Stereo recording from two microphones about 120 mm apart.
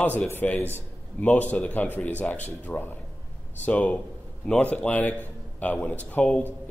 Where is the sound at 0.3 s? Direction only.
15° left (ahead or behind).